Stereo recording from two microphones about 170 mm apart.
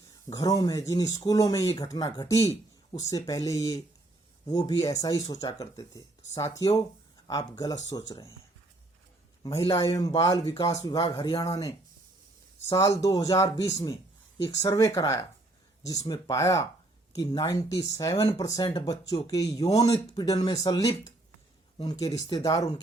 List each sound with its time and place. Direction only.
0.3 s speech: 20° left (ahead or behind)
9.6 s speech: 20° left (ahead or behind)
12.6 s speech: 15° left (ahead or behind)
18.6 s speech: 35° left (ahead or behind)